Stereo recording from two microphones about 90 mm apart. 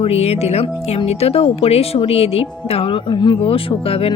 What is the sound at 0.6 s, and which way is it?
Speech, 90° left.